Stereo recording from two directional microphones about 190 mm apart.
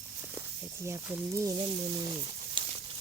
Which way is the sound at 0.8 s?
15° right (ahead or behind).